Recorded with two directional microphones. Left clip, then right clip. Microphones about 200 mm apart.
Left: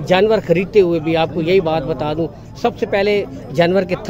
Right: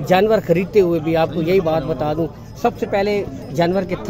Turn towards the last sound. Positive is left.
turn(degrees=20)  # may be behind; listen again after turning